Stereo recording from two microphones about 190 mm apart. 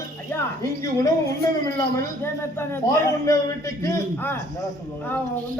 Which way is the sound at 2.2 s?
15° left (ahead or behind).